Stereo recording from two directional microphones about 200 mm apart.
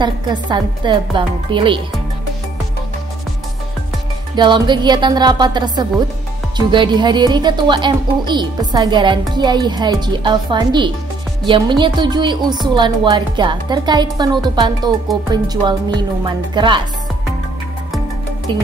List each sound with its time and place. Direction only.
0.0 s speech: 20° right (ahead or behind)
4.4 s speech: 20° right (ahead or behind)